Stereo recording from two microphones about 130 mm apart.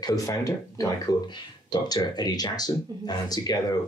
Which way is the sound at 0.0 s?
25° left (ahead or behind).